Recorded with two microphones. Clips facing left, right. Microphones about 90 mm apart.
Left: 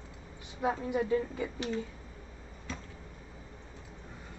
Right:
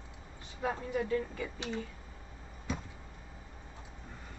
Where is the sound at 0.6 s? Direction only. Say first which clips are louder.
Left 3 dB; 15° left (ahead or behind).